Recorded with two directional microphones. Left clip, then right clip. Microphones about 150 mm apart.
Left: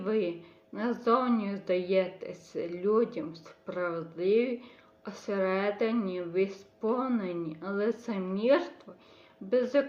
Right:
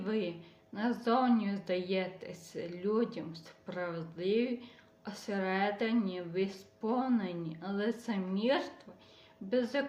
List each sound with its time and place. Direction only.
0.0 s a woman's voice: 15° right (ahead or behind)